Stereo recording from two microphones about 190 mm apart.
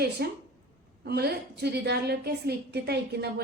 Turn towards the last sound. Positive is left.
turn(degrees=-60)  # may be behind; listen again after turning